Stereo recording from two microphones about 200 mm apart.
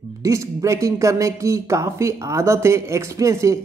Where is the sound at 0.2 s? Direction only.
15° right (ahead or behind).